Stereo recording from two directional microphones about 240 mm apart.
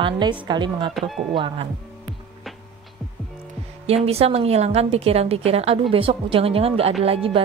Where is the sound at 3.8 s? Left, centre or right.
Right.